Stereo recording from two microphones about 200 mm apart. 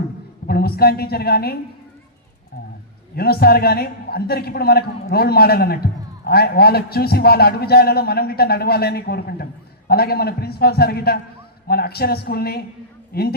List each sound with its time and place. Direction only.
0.4 s a man's voice: 50° left (ahead or behind)
3.2 s a man's voice: 50° left (ahead or behind)